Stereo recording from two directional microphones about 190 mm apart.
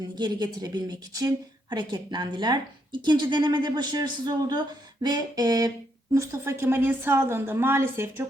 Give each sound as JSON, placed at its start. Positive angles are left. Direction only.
{"t": 0.2, "sound": "a woman's voice", "side_deg": -20}